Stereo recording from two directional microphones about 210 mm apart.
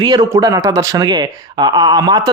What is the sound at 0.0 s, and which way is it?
Speech, 20° right (ahead or behind).